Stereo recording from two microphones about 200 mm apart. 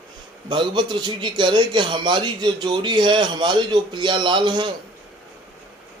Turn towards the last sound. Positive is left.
turn(degrees=-25)  # may be behind; listen again after turning